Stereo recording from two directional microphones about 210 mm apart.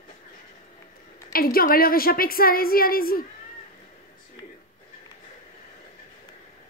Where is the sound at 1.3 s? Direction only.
45° left (ahead or behind).